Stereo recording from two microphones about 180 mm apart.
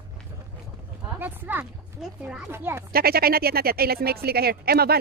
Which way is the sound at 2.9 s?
55° right (ahead or behind).